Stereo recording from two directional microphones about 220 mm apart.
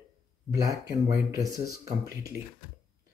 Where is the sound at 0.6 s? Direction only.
15° right (ahead or behind).